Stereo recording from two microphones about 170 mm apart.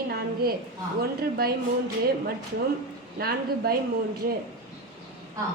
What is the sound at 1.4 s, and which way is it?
Speech, 60° right (ahead or behind).